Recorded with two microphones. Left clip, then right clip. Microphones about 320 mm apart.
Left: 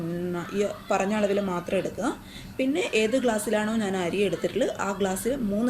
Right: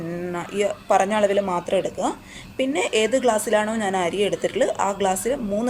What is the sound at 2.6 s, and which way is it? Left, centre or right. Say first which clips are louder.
Speech: right 4 dB; centre.